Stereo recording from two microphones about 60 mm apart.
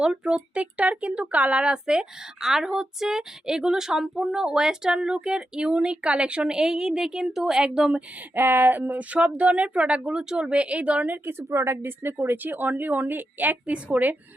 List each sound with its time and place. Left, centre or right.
0.0 s speech: centre
8.4 s speech: right
8.8 s speech: right
11.3 s speech: right